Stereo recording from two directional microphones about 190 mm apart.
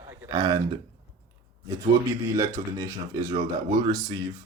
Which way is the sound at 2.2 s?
15° right (ahead or behind).